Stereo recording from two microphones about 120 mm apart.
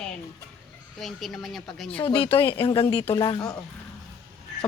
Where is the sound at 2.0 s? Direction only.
45° left (ahead or behind).